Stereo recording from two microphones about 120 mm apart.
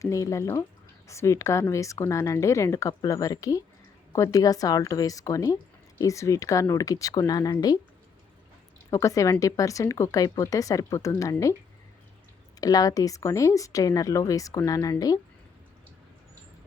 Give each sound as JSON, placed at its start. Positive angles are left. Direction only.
{"t": 0.0, "sound": "speech", "side_deg": 25}
{"t": 8.9, "sound": "speech", "side_deg": 25}
{"t": 12.5, "sound": "speech", "side_deg": 30}